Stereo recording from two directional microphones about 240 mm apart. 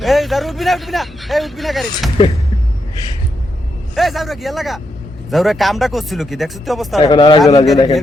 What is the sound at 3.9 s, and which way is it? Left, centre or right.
A man's voice, centre.